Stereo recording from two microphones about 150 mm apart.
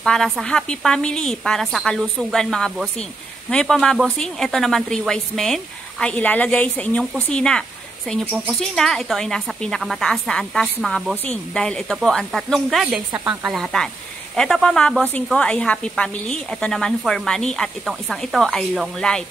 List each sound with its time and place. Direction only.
0.0 s a woman's voice: 5° left (ahead or behind)
13.6 s a woman's voice: 5° left (ahead or behind)